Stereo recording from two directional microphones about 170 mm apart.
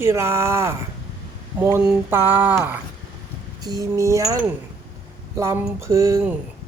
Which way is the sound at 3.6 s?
20° right (ahead or behind).